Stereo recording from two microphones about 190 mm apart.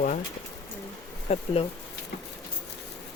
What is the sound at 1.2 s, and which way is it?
Speech, 35° left (ahead or behind).